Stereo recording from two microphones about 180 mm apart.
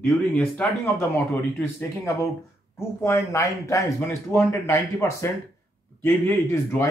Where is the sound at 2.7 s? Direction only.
15° left (ahead or behind).